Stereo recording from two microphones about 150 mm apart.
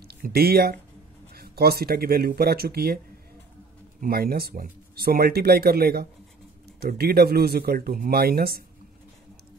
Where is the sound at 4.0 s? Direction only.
85° right.